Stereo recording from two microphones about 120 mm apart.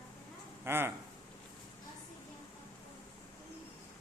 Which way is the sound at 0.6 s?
20° right (ahead or behind).